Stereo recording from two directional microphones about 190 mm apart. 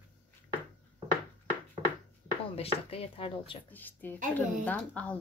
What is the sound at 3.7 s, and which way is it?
Speech, 10° left (ahead or behind).